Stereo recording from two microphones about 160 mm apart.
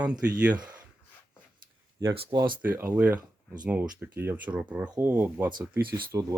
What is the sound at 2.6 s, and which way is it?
Speech, 10° right (ahead or behind).